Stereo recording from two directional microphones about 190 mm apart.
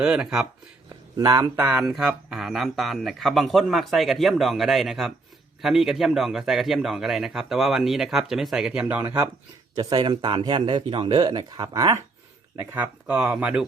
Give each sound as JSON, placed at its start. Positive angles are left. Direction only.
{"t": 0.0, "sound": "speech", "side_deg": -5}
{"t": 1.2, "sound": "speech", "side_deg": -20}
{"t": 1.6, "sound": "speech", "side_deg": -5}
{"t": 9.7, "sound": "speech", "side_deg": -20}
{"t": 12.7, "sound": "speech", "side_deg": -10}